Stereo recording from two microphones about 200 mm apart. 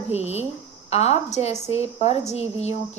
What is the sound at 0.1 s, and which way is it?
A woman's voice, 30° left (ahead or behind).